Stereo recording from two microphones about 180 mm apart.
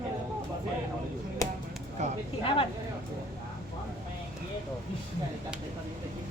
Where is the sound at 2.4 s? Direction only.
30° left (ahead or behind).